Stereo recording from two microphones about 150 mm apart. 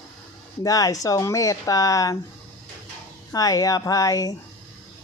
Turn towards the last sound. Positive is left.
turn(degrees=25)  # may be behind; listen again after turning